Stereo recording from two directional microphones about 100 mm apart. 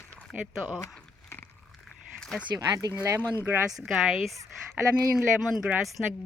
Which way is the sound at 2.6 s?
35° right (ahead or behind).